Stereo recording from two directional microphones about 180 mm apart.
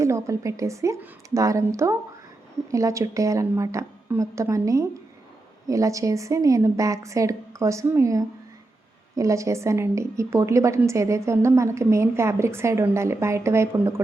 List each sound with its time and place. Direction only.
0.0 s a woman's voice: 15° right (ahead or behind)